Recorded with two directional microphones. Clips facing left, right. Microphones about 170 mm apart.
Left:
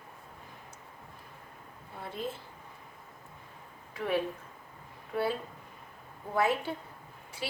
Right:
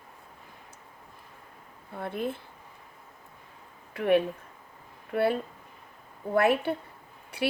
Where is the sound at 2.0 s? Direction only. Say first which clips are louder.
Right 6 dB; 60° right (ahead or behind).